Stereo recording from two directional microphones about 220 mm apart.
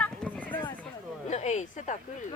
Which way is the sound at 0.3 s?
5° left (ahead or behind).